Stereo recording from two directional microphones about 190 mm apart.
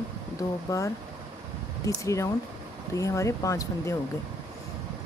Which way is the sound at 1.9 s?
15° left (ahead or behind).